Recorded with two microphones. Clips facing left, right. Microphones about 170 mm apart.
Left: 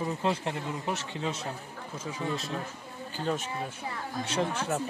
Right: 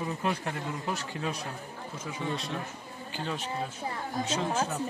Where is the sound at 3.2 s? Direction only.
45° left (ahead or behind).